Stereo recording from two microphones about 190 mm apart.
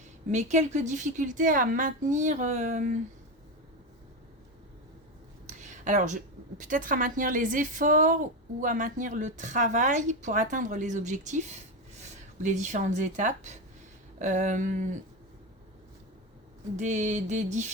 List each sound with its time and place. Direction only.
0.3 s speech: 40° right (ahead or behind)
5.5 s a woman's voice: 40° right (ahead or behind)
16.7 s speech: 40° right (ahead or behind)